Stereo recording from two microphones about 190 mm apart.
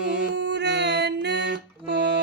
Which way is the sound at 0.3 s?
65° right (ahead or behind).